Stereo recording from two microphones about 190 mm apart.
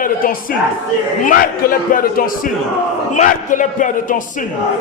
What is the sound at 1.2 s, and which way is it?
A man's voice, 50° left (ahead or behind).